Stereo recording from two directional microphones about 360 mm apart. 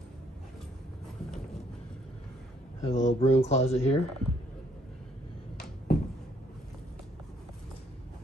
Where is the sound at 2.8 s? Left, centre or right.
Centre.